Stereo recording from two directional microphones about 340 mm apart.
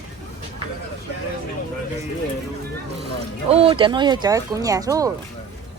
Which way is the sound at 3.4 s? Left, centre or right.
Centre.